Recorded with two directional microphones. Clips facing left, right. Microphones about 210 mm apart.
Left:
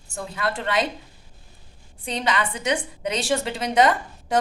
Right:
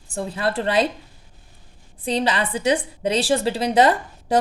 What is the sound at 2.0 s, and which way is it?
A woman's voice, 35° right (ahead or behind).